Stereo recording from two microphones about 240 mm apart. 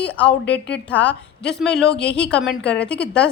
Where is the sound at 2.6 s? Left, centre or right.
Left.